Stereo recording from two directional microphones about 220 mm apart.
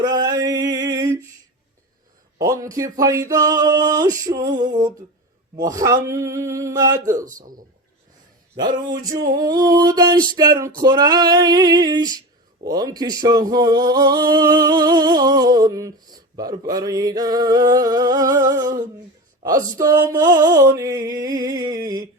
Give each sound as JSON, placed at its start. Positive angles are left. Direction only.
{"t": 0.0, "sound": "a sound", "side_deg": -15}
{"t": 2.4, "sound": "speech", "side_deg": -15}
{"t": 8.5, "sound": "speech", "side_deg": -20}